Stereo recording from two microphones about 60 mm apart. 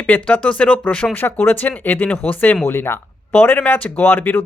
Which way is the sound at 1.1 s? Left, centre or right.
Left.